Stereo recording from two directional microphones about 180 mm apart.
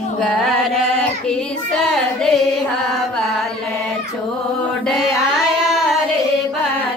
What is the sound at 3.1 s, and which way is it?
Mantra, centre (ahead or behind).